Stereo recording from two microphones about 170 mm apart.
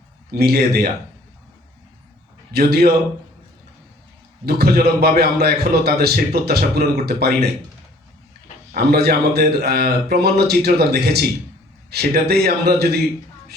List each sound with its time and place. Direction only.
0.3 s speech: 65° right (ahead or behind)
2.5 s a man's voice: 65° right (ahead or behind)
4.4 s a man's voice: 65° right (ahead or behind)
8.7 s a man's voice: 65° right (ahead or behind)